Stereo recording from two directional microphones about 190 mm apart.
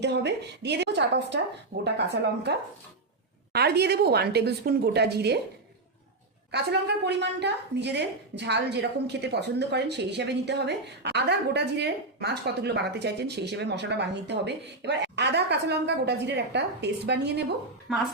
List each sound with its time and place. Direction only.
0.0 s a woman's voice: 65° right (ahead or behind)
6.5 s a woman's voice: 60° right (ahead or behind)
17.9 s a woman's voice: centre (ahead or behind)